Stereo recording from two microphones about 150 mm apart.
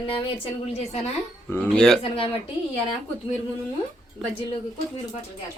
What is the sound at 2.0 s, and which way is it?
Speech, 35° left (ahead or behind).